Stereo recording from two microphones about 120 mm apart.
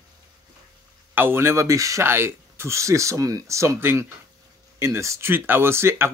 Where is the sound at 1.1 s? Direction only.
20° right (ahead or behind).